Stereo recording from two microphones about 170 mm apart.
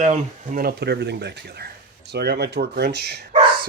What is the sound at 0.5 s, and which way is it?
Speech, 65° right (ahead or behind).